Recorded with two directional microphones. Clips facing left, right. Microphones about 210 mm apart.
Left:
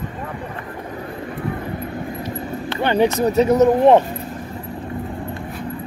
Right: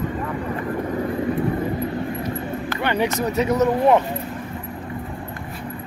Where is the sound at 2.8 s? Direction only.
30° left (ahead or behind).